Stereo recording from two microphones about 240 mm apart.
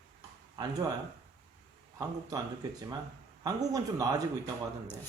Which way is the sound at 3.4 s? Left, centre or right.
Centre.